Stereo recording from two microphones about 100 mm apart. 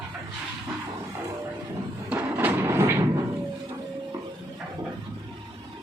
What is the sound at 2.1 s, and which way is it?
Music, 20° right (ahead or behind).